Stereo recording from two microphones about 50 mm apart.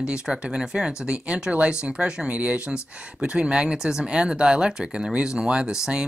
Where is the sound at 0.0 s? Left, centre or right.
Centre.